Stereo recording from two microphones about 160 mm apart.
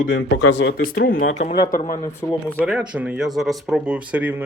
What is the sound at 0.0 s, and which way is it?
Speech, 65° left (ahead or behind).